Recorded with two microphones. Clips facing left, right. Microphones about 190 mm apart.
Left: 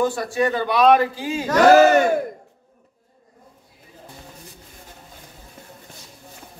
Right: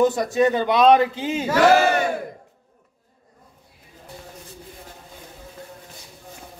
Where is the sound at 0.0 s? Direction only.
20° right (ahead or behind).